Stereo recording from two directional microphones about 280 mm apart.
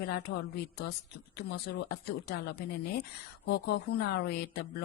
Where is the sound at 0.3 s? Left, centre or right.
Left.